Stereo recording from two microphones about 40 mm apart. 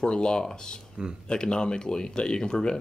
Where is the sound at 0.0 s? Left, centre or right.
Left.